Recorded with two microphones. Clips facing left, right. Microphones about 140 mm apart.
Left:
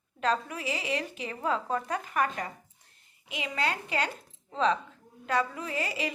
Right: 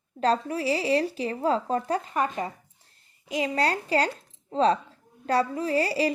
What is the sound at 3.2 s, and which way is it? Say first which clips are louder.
A woman's voice: right 6 dB; 40° right (ahead or behind).